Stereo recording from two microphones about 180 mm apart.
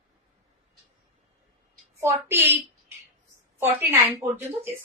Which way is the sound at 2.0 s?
15° right (ahead or behind).